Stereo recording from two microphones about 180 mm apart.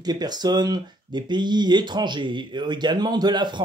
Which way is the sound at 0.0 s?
20° right (ahead or behind).